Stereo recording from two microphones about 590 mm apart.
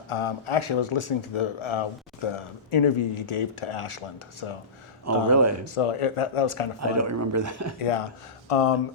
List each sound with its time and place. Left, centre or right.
0.1 s speech: left
5.3 s speech: right
5.6 s speech: left
6.7 s speech: right
7.8 s speech: left